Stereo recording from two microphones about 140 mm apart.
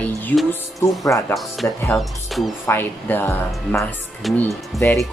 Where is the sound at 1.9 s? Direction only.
Centre (ahead or behind).